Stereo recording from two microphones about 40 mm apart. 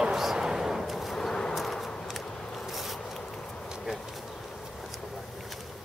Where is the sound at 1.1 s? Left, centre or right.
Centre.